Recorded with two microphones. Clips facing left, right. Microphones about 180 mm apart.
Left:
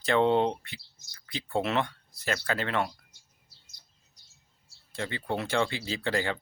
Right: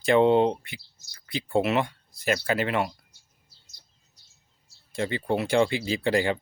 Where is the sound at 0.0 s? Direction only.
10° right (ahead or behind).